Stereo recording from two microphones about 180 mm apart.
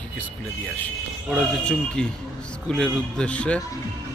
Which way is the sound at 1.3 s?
Centre (ahead or behind).